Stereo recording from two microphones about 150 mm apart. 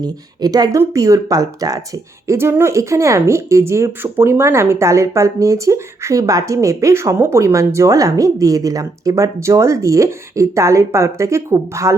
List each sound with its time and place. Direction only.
0.0 s speech: 25° right (ahead or behind)